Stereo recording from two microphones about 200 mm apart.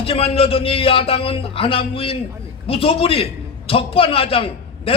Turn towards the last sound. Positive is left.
turn(degrees=30)  # may be behind; listen again after turning